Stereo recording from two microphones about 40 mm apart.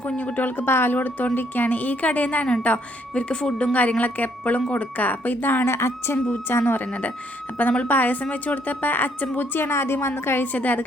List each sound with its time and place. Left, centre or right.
0.2 s a woman's voice: left
0.6 s speech: left
0.9 s a woman's voice: left
3.2 s speech: left
3.8 s a woman's voice: left
5.6 s a woman's voice: left
6.5 s a woman's voice: left
8.2 s a woman's voice: left
9.6 s a woman's voice: left
10.4 s a woman's voice: left